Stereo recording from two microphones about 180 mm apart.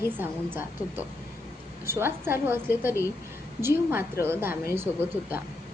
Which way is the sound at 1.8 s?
15° right (ahead or behind).